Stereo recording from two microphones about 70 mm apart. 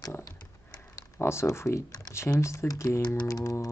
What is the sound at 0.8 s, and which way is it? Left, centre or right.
Computer keyboard, left.